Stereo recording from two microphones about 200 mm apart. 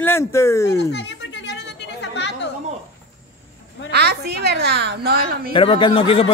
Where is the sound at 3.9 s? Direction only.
55° right (ahead or behind).